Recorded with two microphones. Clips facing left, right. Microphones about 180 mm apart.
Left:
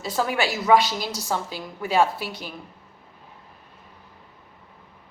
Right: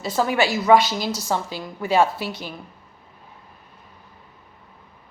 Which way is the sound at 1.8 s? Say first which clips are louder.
Right 2 dB; centre (ahead or behind).